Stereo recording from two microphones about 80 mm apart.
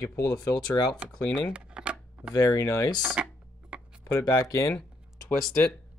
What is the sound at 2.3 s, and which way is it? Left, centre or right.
Speech, left.